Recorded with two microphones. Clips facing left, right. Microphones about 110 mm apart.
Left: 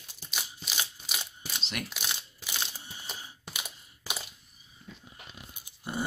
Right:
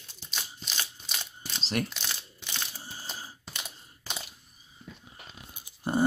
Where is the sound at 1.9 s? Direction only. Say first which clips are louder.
Left 1 dB; 10° left (ahead or behind).